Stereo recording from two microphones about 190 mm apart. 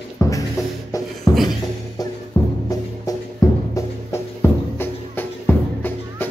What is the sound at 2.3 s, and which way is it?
Music, 15° left (ahead or behind).